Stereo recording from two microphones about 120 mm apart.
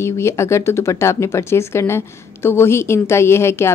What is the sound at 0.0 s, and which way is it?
Speech, 25° left (ahead or behind).